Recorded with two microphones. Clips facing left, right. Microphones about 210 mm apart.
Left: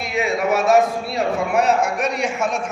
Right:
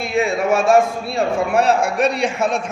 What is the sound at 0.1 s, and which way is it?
A man's voice, 30° right (ahead or behind).